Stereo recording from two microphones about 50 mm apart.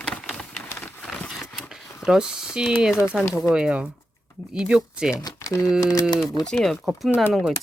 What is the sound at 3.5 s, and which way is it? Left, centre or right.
Speech, right.